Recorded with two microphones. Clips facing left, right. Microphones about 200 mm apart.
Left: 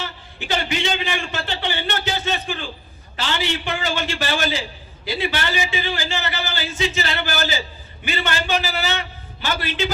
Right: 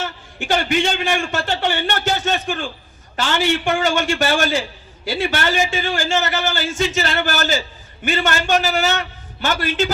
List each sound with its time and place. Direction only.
0.0 s a man's voice: 50° right (ahead or behind)